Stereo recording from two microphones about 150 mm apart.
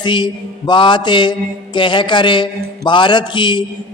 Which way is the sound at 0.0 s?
30° left (ahead or behind).